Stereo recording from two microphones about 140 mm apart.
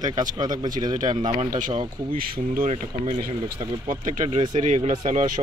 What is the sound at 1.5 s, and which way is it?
Speech, 70° right (ahead or behind).